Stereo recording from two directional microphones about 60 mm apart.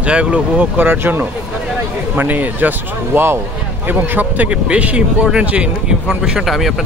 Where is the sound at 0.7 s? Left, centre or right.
Right.